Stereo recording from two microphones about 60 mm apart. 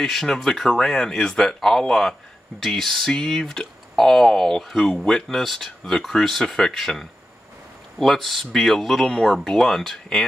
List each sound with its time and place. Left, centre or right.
0.0 s speech: centre